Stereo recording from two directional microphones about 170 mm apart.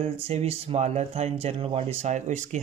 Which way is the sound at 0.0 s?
40° right (ahead or behind).